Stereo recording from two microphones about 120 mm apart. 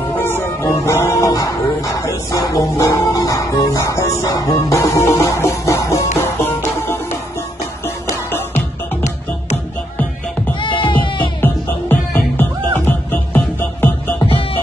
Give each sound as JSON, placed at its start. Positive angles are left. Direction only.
{"t": 0.2, "sound": "music", "side_deg": 15}
{"t": 8.5, "sound": "music", "side_deg": 70}
{"t": 10.6, "sound": "music", "side_deg": 45}
{"t": 11.4, "sound": "music", "side_deg": 15}
{"t": 14.2, "sound": "music", "side_deg": 50}